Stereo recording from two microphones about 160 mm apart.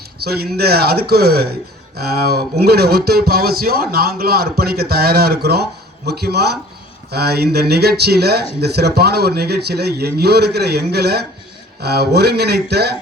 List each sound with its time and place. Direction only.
0.2 s speech: 80° right